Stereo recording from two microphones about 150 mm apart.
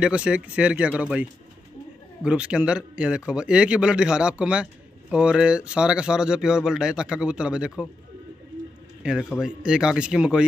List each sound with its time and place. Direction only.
0.0 s a man's voice: 5° right (ahead or behind)
9.0 s speech: 5° right (ahead or behind)